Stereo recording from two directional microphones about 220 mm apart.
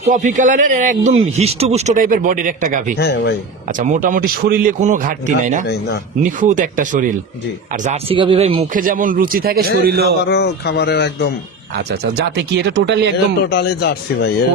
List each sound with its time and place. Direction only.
0.1 s a man's voice: 35° right (ahead or behind)
3.0 s speech: 50° left (ahead or behind)
3.8 s a man's voice: 35° right (ahead or behind)
8.7 s a man's voice: 40° right (ahead or behind)
10.2 s speech: 50° left (ahead or behind)
12.5 s speech: 50° right (ahead or behind)
13.4 s speech: 45° left (ahead or behind)